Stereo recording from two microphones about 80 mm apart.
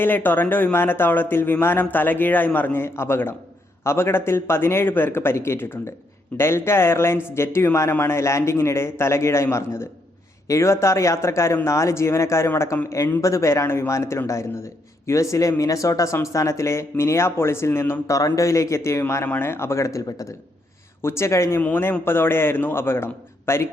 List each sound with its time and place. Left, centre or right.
0.0 s a man's voice: left
21.0 s speech: left
21.6 s speech: left